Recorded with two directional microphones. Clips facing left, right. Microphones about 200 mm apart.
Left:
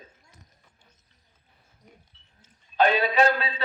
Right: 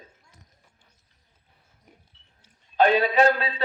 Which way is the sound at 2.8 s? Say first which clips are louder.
Right 2 dB; 45° right (ahead or behind).